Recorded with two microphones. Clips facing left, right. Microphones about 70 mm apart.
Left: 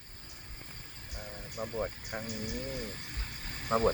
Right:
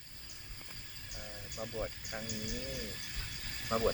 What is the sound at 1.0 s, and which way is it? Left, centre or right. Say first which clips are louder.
Speech: left 4 dB; left.